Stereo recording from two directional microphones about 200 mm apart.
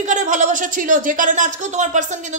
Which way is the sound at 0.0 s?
35° right (ahead or behind).